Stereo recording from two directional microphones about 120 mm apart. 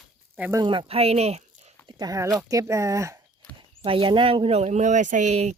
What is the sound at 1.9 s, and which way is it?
Speech, 30° right (ahead or behind).